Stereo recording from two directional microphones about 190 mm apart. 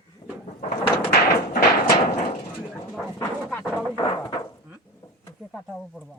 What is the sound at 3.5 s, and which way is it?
Speech, 10° left (ahead or behind).